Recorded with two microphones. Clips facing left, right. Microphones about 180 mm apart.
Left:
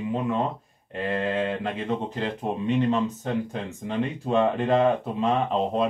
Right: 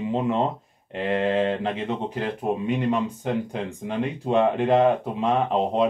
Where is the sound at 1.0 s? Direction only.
20° right (ahead or behind).